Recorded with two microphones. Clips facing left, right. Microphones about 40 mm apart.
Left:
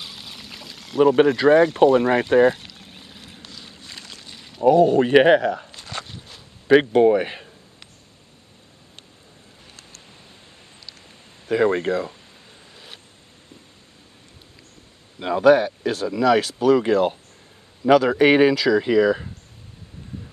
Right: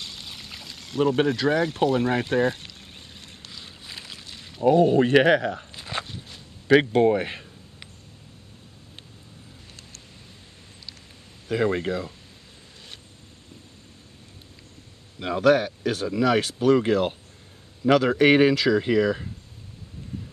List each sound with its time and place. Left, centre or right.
0.0 s a sound: centre
3.5 s boat: centre
4.3 s a sound: centre
5.1 s speech: centre
5.5 s speech: centre
5.8 s walk: centre
6.0 s walk: centre
6.7 s speech: centre
11.4 s speech: centre
15.1 s speech: centre